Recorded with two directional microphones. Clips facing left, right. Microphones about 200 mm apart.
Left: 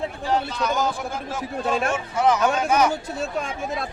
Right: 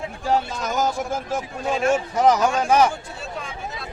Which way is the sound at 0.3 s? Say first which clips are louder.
Right 2 dB; 40° right (ahead or behind).